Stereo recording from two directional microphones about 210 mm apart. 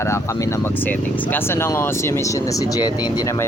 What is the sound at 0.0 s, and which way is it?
Speech, 15° left (ahead or behind).